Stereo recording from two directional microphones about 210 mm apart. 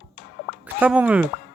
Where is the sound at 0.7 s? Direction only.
5° right (ahead or behind).